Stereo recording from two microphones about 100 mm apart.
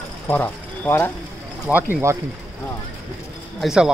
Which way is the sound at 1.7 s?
15° right (ahead or behind).